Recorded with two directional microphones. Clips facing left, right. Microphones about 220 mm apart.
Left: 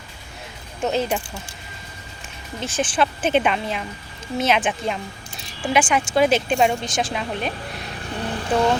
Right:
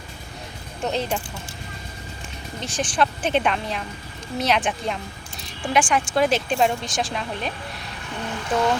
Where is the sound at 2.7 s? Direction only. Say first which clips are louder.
Left 1 dB; 5° left (ahead or behind).